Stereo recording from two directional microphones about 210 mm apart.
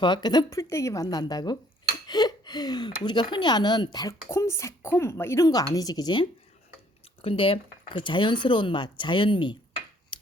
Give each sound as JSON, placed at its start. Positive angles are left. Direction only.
{"t": 0.0, "sound": "speech", "side_deg": 20}